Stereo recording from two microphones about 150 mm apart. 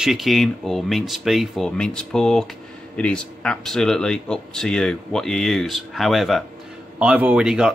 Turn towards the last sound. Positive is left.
turn(degrees=-5)  # may be behind; listen again after turning